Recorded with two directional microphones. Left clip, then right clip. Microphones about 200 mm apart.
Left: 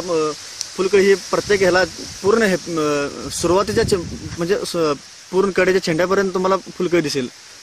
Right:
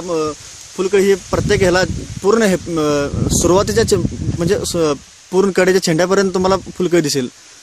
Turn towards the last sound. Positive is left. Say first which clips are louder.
# right 3 dB
turn(degrees=-50)  # may be behind; listen again after turning